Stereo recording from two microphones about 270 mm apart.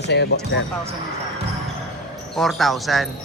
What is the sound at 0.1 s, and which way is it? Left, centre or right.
Speech, left.